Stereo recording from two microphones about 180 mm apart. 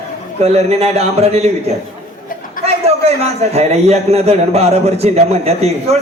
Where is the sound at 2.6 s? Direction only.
35° right (ahead or behind).